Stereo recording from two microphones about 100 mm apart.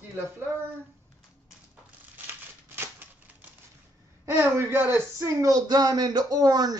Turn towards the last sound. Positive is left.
turn(degrees=-40)  # may be behind; listen again after turning